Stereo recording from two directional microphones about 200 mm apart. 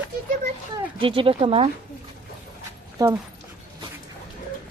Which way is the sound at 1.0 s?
25° right (ahead or behind).